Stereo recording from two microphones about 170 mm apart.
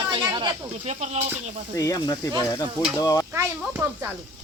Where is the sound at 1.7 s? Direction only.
20° left (ahead or behind).